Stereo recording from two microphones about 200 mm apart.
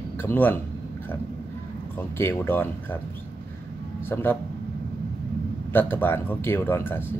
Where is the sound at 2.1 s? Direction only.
10° left (ahead or behind).